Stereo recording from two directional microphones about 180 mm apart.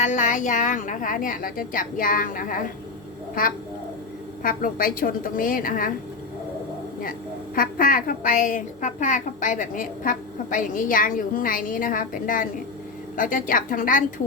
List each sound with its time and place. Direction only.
0.0 s a woman's voice: 45° left (ahead or behind)
4.4 s a woman's voice: 50° left (ahead or behind)
7.0 s a woman's voice: 50° left (ahead or behind)